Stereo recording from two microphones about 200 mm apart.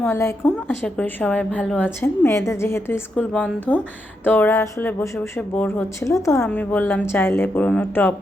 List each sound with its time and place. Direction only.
0.0 s a woman's voice: 15° left (ahead or behind)